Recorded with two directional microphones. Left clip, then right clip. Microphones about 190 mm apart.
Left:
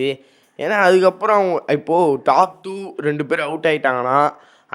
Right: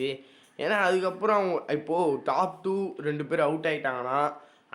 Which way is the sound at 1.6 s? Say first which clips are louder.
Left 11 dB; 35° left (ahead or behind).